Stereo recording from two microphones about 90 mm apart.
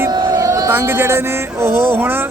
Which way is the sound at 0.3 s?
35° right (ahead or behind).